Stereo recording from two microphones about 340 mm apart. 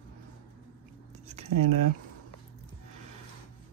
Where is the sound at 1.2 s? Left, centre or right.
Centre.